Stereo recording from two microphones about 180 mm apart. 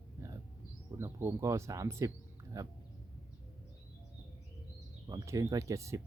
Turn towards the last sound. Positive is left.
turn(degrees=-15)  # may be behind; listen again after turning